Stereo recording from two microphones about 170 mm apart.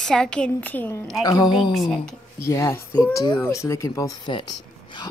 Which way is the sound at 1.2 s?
25° left (ahead or behind).